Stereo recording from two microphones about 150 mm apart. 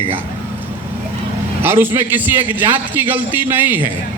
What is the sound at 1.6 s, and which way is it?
A man's voice, 15° right (ahead or behind).